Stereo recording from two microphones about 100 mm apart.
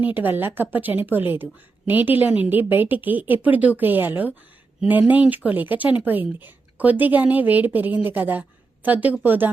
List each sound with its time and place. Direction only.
0.0 s a woman's voice: 20° right (ahead or behind)